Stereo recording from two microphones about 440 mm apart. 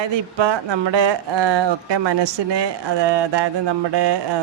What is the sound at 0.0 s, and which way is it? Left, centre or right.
Speech, right.